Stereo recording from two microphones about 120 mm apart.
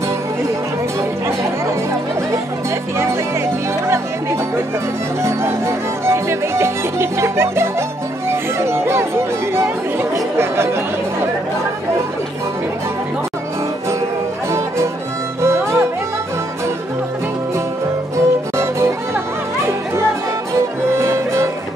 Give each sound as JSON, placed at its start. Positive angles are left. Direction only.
{"t": 3.8, "sound": "music", "side_deg": -20}
{"t": 15.4, "sound": "music", "side_deg": -20}
{"t": 18.1, "sound": "music", "side_deg": -20}